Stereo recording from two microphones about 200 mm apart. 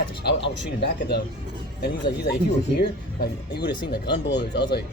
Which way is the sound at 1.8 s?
55° left (ahead or behind).